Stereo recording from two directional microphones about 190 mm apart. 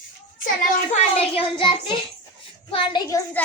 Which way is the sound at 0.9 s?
30° left (ahead or behind).